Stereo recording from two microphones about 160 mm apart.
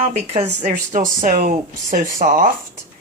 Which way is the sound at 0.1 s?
45° right (ahead or behind).